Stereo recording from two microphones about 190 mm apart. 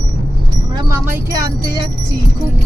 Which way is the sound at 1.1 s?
15° right (ahead or behind).